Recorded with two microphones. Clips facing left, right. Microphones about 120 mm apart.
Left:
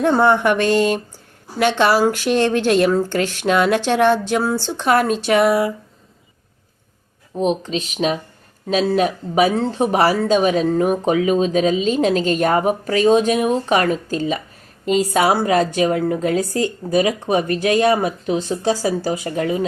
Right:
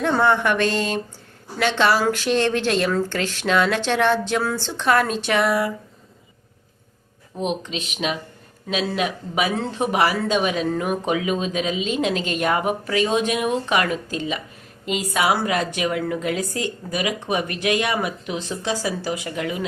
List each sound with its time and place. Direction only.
0.1 s a sound: 25° left (ahead or behind)
0.7 s speech: 45° left (ahead or behind)
7.3 s speech: 40° left (ahead or behind)